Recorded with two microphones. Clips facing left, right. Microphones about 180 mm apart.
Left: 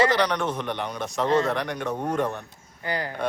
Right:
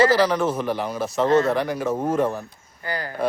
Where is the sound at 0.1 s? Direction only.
5° right (ahead or behind).